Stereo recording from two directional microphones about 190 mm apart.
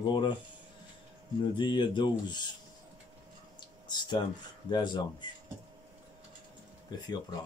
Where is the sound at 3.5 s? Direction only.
25° left (ahead or behind).